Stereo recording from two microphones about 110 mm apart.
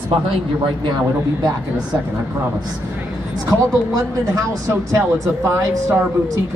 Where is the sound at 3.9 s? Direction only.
30° right (ahead or behind).